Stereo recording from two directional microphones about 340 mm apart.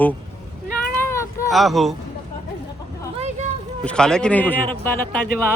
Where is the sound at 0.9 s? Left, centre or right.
Centre.